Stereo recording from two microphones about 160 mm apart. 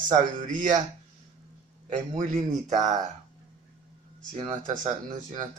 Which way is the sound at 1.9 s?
50° right (ahead or behind).